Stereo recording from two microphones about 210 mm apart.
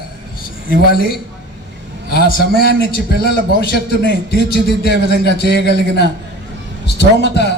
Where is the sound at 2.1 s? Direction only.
50° left (ahead or behind).